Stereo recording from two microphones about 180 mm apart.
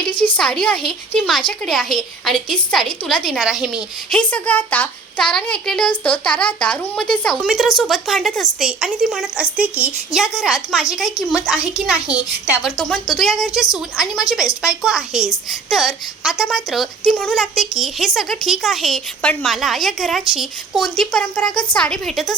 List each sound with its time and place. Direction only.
0.1 s a woman's voice: 30° left (ahead or behind)
0.3 s a woman's voice: 5° left (ahead or behind)
4.1 s a woman's voice: 5° left (ahead or behind)